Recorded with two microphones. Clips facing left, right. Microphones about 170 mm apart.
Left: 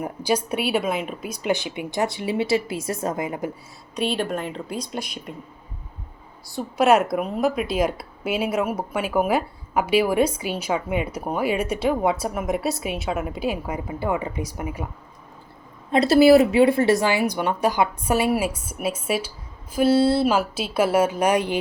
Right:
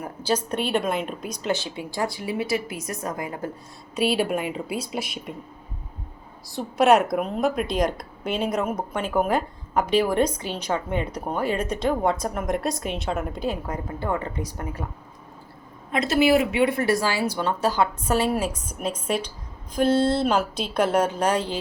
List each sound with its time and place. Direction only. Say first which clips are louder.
0.0 s a woman's voice: left 2 dB; 15° left (ahead or behind)
3.9 s a woman's voice: right 2 dB; 5° right (ahead or behind)
6.5 s a woman's voice: even; centre (ahead or behind)
15.9 s a woman's voice: left 6 dB; 35° left (ahead or behind); by 21.6 s 15° left (ahead or behind)